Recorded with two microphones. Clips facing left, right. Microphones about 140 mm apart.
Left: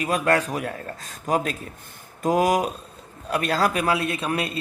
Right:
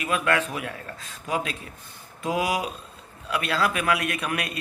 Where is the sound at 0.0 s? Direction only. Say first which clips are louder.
Left 3 dB; 40° left (ahead or behind).